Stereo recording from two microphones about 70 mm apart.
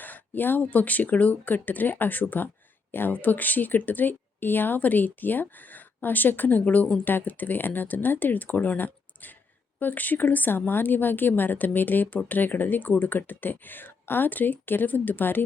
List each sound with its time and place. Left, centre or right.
0.0 s a woman's voice: left